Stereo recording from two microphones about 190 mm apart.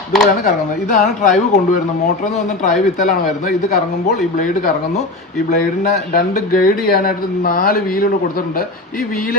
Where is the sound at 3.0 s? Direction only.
50° left (ahead or behind).